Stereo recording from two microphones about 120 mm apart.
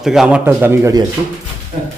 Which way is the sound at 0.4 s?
20° right (ahead or behind).